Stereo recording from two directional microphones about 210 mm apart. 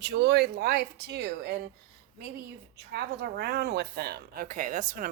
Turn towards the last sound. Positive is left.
turn(degrees=-40)  # may be behind; listen again after turning